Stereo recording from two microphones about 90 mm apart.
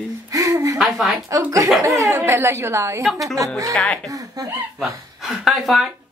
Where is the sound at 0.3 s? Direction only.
40° right (ahead or behind).